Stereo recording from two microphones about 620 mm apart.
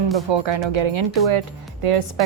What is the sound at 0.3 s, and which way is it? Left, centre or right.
A woman's voice, right.